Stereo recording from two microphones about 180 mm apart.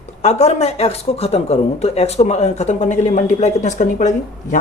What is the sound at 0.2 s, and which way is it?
Speech, 35° left (ahead or behind).